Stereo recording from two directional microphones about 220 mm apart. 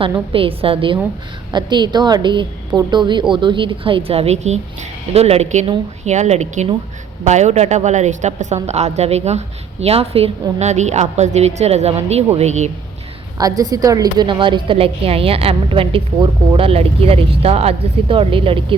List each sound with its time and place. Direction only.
0.0 s a woman's voice: 25° right (ahead or behind)
13.4 s a woman's voice: 15° right (ahead or behind)